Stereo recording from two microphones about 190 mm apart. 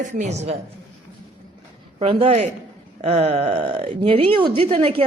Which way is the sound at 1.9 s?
30° right (ahead or behind).